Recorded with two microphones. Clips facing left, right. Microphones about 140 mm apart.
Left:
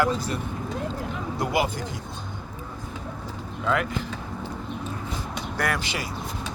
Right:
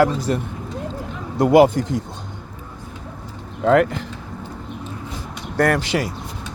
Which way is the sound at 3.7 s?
75° right (ahead or behind).